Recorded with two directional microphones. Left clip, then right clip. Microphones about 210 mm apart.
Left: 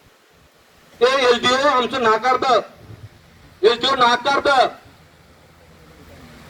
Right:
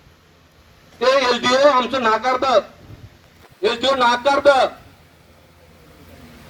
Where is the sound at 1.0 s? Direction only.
25° right (ahead or behind).